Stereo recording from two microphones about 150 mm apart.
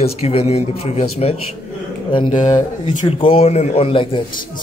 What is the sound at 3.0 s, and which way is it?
A man's voice, 35° left (ahead or behind).